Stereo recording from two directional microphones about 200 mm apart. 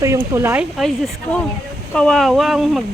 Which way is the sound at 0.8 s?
Centre (ahead or behind).